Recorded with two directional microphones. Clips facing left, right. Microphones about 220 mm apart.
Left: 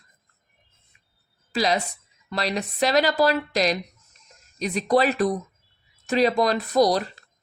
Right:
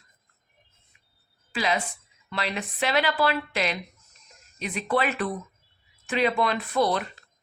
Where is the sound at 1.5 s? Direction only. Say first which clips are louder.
Left 4 dB; 40° left (ahead or behind).